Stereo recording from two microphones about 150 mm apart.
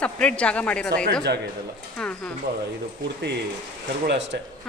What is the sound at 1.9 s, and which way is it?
Speech, 5° left (ahead or behind).